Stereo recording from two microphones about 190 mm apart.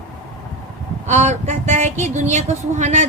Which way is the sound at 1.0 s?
35° right (ahead or behind).